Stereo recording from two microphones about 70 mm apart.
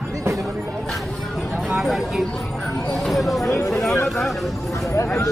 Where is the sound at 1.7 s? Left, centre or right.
Centre.